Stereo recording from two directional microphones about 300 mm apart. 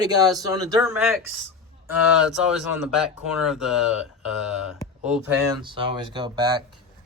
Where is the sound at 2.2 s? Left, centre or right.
Centre.